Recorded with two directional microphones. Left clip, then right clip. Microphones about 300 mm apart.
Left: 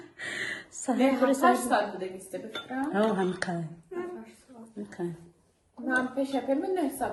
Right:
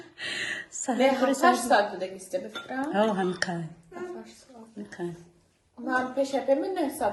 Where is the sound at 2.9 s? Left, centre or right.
Centre.